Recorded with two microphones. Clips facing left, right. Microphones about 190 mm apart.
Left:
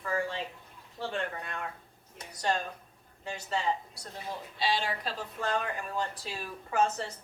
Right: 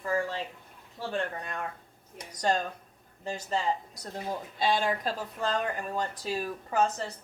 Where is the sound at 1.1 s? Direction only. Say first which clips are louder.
Right 4 dB; 40° right (ahead or behind).